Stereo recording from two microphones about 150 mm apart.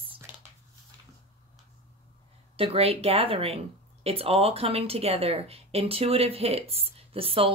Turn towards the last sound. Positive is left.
turn(degrees=-40)  # may be behind; listen again after turning